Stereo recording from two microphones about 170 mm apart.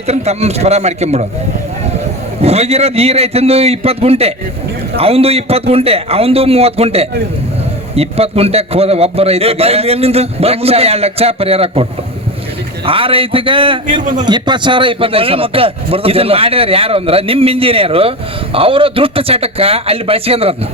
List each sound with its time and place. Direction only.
0.1 s a man's voice: 40° right (ahead or behind)
2.4 s a man's voice: 35° right (ahead or behind)